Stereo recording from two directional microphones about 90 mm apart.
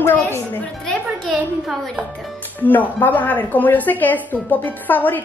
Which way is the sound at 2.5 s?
20° left (ahead or behind).